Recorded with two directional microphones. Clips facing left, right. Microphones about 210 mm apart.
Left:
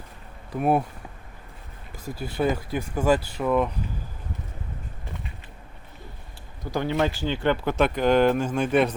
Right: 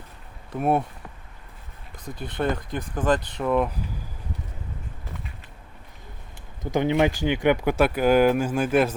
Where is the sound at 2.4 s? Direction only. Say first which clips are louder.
Left 2 dB; 5° left (ahead or behind).